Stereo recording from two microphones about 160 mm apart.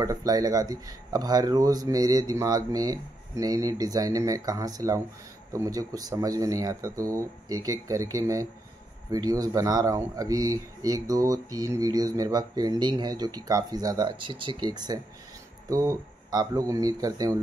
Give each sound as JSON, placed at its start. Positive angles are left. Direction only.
{"t": 0.0, "sound": "speech", "side_deg": -20}